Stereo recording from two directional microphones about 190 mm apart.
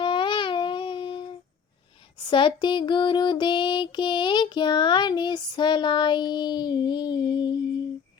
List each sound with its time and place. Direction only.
0.0 s babbling: 25° left (ahead or behind)
2.3 s child singing: 25° left (ahead or behind)